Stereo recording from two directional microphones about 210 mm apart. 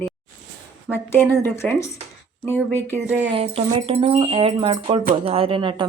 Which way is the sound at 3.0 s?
5° right (ahead or behind).